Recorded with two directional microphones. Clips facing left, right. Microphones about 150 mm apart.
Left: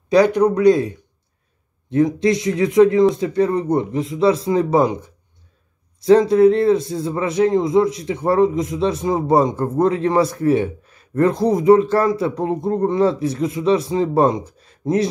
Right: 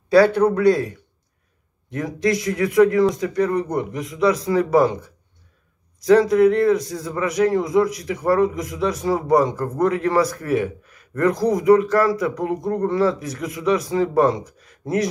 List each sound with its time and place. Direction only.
0.1 s a man's voice: 15° left (ahead or behind)